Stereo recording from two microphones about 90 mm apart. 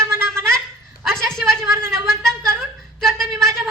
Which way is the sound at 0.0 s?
30° right (ahead or behind).